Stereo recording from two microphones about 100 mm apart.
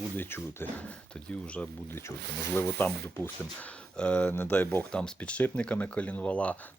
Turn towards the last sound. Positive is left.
turn(degrees=15)  # may be behind; listen again after turning